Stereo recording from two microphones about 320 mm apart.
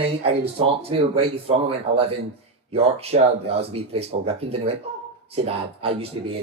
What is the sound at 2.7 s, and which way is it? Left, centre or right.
Speech, centre.